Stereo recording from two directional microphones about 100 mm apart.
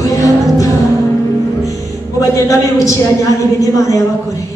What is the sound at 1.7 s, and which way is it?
Music, 35° left (ahead or behind).